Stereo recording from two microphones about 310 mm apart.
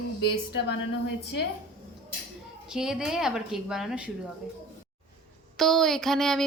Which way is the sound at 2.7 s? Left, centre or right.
Centre.